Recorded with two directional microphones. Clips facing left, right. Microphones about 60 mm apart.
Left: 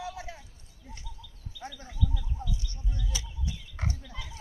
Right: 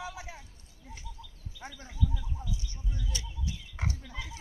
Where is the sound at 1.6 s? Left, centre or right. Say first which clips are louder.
Even; centre.